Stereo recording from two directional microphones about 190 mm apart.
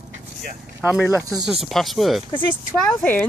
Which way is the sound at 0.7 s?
Centre (ahead or behind).